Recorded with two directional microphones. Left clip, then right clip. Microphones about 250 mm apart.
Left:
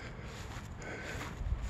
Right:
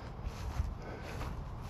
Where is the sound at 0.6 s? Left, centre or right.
Centre.